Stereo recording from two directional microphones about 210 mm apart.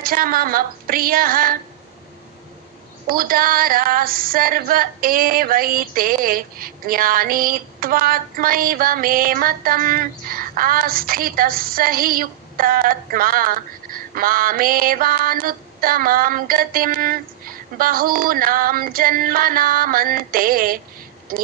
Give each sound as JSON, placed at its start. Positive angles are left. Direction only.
{"t": 0.0, "sound": "female singing", "side_deg": -45}
{"t": 3.1, "sound": "female singing", "side_deg": -45}
{"t": 21.3, "sound": "a woman's voice", "side_deg": -45}